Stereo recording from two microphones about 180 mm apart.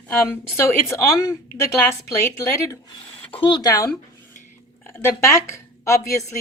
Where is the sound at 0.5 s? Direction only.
15° left (ahead or behind).